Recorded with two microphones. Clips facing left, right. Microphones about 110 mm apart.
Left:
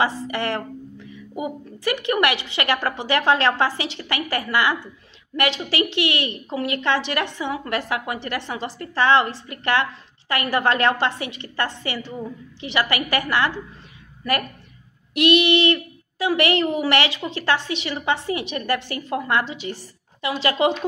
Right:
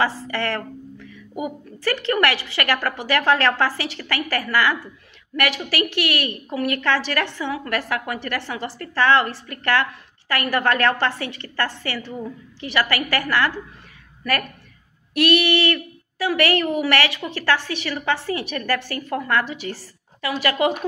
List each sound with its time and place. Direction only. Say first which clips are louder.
0.0 s a woman's voice: even; 20° left (ahead or behind)
15.1 s a woman's voice: left 1 dB; 20° left (ahead or behind)